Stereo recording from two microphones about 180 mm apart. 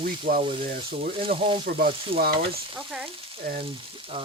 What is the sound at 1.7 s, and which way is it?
Frying, 60° right (ahead or behind).